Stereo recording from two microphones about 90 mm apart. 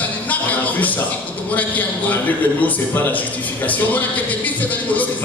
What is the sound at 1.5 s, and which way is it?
Speech, 20° left (ahead or behind).